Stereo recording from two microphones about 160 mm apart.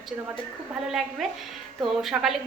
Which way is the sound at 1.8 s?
Centre (ahead or behind).